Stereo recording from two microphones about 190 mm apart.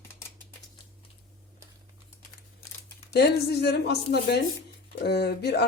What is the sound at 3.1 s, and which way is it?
Speech, 60° left (ahead or behind).